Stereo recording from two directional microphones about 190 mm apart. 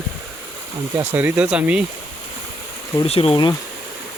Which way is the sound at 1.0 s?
10° right (ahead or behind).